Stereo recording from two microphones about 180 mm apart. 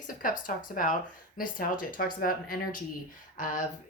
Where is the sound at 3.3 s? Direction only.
45° left (ahead or behind).